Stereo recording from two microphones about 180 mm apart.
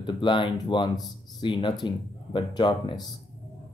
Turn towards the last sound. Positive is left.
turn(degrees=25)  # may be behind; listen again after turning